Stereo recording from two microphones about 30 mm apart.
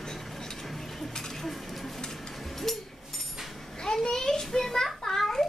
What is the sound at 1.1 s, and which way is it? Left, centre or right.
Dishes, centre.